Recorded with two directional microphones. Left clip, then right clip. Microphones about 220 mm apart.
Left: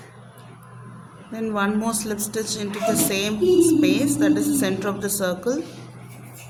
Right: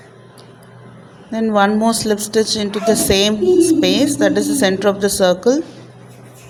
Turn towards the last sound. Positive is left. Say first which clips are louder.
# right 10 dB
turn(degrees=-20)  # may be behind; listen again after turning